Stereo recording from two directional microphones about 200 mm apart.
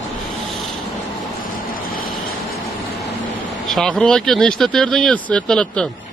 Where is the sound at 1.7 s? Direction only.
45° left (ahead or behind).